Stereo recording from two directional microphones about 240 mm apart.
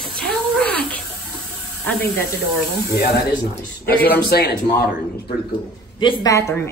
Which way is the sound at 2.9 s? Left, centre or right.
Left.